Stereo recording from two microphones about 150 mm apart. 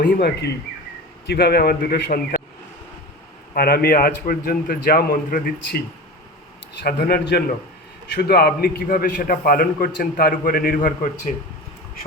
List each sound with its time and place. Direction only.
0.0 s a man's voice: 90° left; by 2.4 s 70° left (ahead or behind)
3.5 s a man's voice: 90° left
6.8 s a man's voice: 90° left; by 11.3 s 55° left (ahead or behind)